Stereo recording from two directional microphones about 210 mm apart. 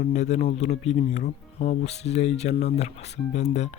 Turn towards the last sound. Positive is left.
turn(degrees=35)  # may be behind; listen again after turning